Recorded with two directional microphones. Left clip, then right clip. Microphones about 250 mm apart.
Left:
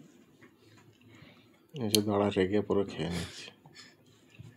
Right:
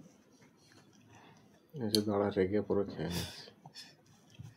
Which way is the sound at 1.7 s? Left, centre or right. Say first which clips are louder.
Left 3 dB; left.